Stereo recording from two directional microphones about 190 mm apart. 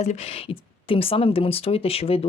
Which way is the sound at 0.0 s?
35° left (ahead or behind).